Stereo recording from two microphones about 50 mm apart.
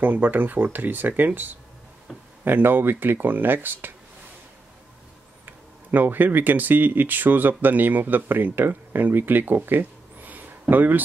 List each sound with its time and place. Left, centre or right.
0.0 s speech: right
5.4 s speech: right
9.7 s a sound: right
10.7 s speech: right